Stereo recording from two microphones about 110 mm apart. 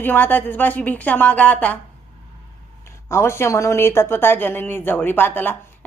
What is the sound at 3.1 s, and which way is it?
Speech, 25° left (ahead or behind).